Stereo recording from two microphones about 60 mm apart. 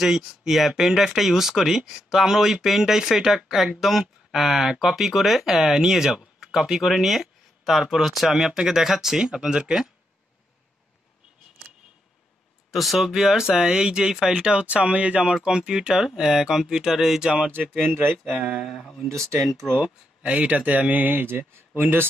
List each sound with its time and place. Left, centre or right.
0.0 s speech: centre
12.7 s speech: centre
17.8 s speech: right
18.7 s speech: centre
19.0 s speech: right
19.7 s speech: right